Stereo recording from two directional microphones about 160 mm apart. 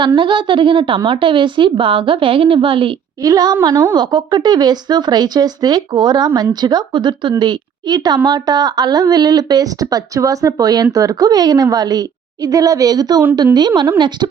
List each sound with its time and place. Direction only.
0.2 s a woman's voice: 30° right (ahead or behind)